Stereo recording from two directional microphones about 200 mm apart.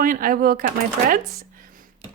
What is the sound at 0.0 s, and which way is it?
Speech, 45° right (ahead or behind).